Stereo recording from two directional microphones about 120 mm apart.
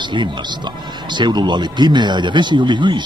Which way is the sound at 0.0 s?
40° right (ahead or behind).